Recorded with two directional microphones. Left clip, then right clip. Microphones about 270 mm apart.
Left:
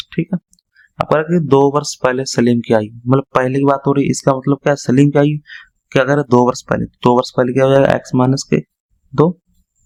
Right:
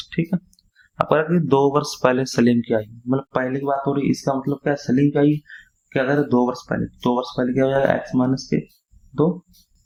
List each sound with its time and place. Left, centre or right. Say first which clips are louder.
0.1 s speech: left 1 dB; centre